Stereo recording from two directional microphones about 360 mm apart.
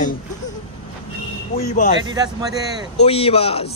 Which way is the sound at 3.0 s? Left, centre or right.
Centre.